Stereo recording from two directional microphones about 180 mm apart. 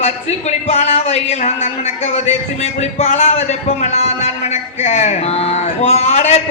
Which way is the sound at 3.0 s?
35° left (ahead or behind).